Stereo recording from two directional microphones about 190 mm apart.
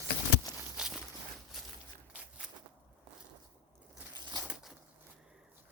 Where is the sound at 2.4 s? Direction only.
5° right (ahead or behind).